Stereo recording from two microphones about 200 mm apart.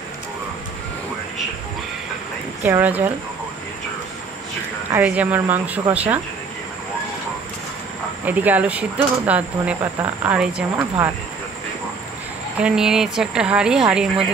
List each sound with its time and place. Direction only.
2.6 s speech: 10° right (ahead or behind)
4.9 s speech: 5° right (ahead or behind)
8.3 s speech: 10° right (ahead or behind)
12.5 s speech: 5° right (ahead or behind)